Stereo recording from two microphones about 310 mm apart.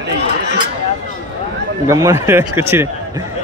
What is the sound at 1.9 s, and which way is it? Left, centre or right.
A man's voice, centre.